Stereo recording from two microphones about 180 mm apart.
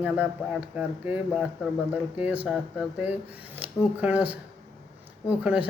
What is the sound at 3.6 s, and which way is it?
Speech, 10° right (ahead or behind).